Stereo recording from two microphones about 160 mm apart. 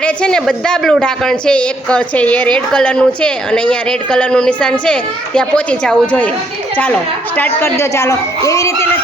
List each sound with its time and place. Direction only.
0.0 s a woman's voice: 5° left (ahead or behind)